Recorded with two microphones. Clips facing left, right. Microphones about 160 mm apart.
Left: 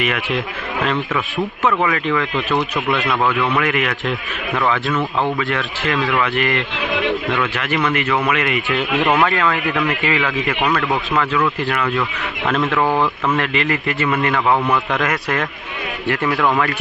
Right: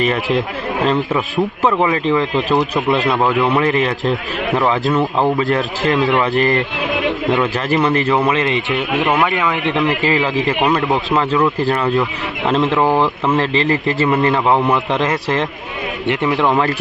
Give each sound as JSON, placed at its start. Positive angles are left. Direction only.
{"t": 0.0, "sound": "a man's voice", "side_deg": -35}
{"t": 5.9, "sound": "a man's voice", "side_deg": -25}
{"t": 10.0, "sound": "a man's voice", "side_deg": -30}